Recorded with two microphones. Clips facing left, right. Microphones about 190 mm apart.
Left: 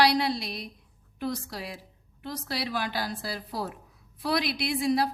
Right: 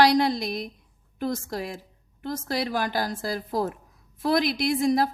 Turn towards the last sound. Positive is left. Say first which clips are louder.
# right 4 dB
turn(degrees=-45)  # may be behind; listen again after turning